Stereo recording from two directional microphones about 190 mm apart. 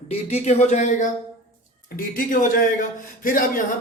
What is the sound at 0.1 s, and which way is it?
Speech, 35° left (ahead or behind).